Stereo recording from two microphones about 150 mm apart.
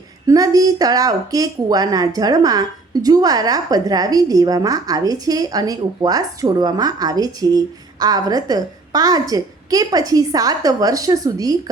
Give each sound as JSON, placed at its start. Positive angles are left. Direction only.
{"t": 0.3, "sound": "speech", "side_deg": -25}